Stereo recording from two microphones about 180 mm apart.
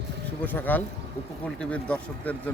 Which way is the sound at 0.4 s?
10° left (ahead or behind).